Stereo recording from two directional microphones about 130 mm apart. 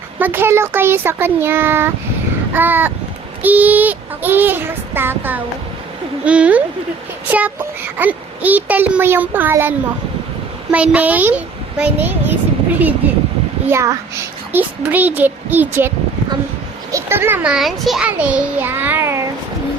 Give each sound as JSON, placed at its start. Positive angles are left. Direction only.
{"t": 0.2, "sound": "a child's voice", "side_deg": -15}
{"t": 16.9, "sound": "a child's voice", "side_deg": -20}